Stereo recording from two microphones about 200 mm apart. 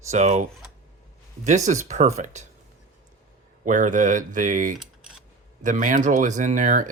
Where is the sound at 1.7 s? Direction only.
35° right (ahead or behind).